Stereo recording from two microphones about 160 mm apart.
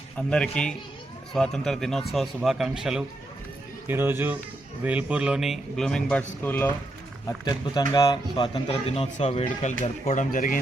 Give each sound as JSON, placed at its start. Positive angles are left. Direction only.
{"t": 0.2, "sound": "speech", "side_deg": 5}
{"t": 7.3, "sound": "speech", "side_deg": 25}
{"t": 9.8, "sound": "speech", "side_deg": 50}